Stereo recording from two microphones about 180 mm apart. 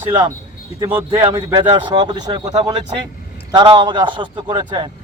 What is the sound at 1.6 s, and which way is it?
A man's voice, 25° right (ahead or behind).